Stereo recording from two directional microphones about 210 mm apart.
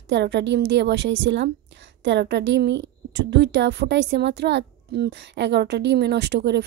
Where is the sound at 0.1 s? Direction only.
55° right (ahead or behind).